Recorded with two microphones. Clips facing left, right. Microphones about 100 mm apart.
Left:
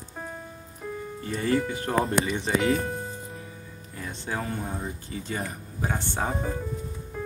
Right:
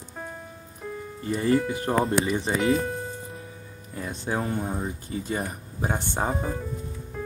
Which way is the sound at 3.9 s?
25° right (ahead or behind).